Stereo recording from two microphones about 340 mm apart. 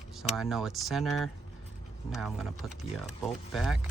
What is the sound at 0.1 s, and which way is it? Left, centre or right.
Speech, centre.